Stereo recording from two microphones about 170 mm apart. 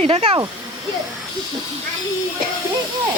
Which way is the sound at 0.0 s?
40° right (ahead or behind).